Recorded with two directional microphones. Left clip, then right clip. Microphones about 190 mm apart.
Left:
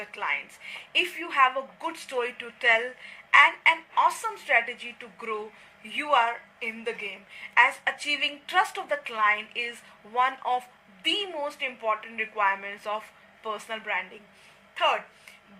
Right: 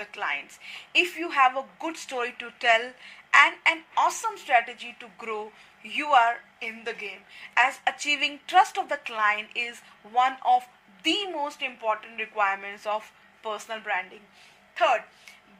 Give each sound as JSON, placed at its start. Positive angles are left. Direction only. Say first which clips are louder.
{"t": 0.0, "sound": "a woman's voice", "louder": "even", "side_deg": -40}